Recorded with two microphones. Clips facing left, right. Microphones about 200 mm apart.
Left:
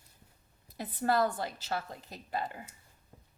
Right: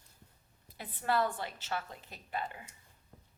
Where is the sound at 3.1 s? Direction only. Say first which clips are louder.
Left 1 dB; 10° left (ahead or behind).